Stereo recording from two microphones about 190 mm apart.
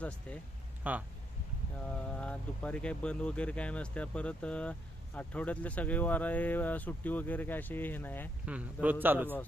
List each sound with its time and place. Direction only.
0.3 s speech: 5° left (ahead or behind)
0.9 s a man's voice: 10° right (ahead or behind)
1.9 s speech: 5° left (ahead or behind)
8.4 s a man's voice: 5° right (ahead or behind)